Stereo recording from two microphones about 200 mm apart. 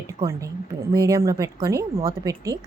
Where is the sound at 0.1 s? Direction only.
15° right (ahead or behind).